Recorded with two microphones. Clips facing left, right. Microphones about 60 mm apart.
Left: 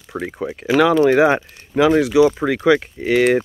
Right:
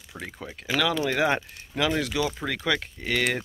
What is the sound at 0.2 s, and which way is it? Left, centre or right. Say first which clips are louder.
Speech: left 11 dB; left.